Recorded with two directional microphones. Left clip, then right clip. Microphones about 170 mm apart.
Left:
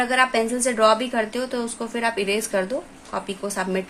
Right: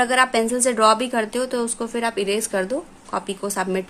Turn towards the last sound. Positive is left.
turn(degrees=-40)  # may be behind; listen again after turning